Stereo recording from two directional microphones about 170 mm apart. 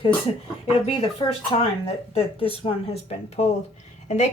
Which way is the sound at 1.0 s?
35° left (ahead or behind).